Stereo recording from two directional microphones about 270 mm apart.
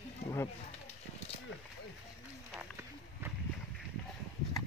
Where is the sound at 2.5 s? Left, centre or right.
Centre.